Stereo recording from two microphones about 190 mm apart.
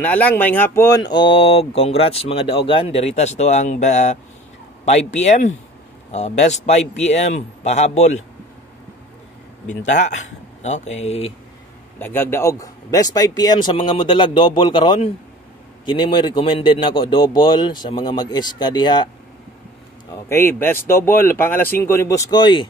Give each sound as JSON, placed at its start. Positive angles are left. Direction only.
{"t": 0.0, "sound": "speech", "side_deg": 10}
{"t": 9.7, "sound": "speech", "side_deg": 40}
{"t": 12.0, "sound": "a man's voice", "side_deg": 10}
{"t": 20.2, "sound": "speech", "side_deg": 10}